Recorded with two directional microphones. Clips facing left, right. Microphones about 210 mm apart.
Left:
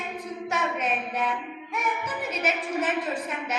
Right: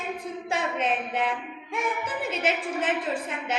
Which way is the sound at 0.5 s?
30° right (ahead or behind).